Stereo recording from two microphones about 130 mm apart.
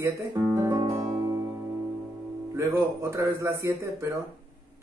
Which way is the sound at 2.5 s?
20° right (ahead or behind).